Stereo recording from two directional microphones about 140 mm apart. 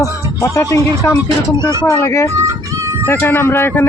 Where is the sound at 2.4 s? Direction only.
20° right (ahead or behind).